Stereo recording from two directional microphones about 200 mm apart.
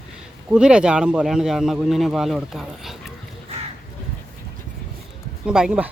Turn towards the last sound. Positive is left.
turn(degrees=-5)  # may be behind; listen again after turning